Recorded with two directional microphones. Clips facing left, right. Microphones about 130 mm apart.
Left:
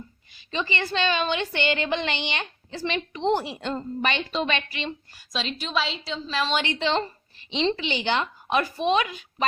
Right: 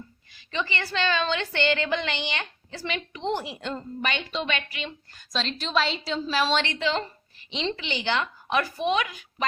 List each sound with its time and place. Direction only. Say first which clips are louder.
0.3 s a woman's voice: left 2 dB; 20° left (ahead or behind)
5.1 s a woman's voice: even; 5° left (ahead or behind)
6.5 s a woman's voice: even; 10° left (ahead or behind)
6.7 s a woman's voice: left 2 dB; 30° left (ahead or behind)